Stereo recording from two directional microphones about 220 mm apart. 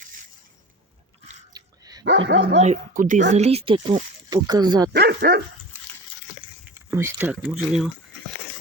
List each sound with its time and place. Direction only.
1.5 s dog: 15° right (ahead or behind)
2.0 s speech: 55° right (ahead or behind)
2.6 s speech: 35° right (ahead or behind); by 4.9 s 20° right (ahead or behind)
4.9 s speech: 50° right (ahead or behind)
6.9 s speech: 10° right (ahead or behind)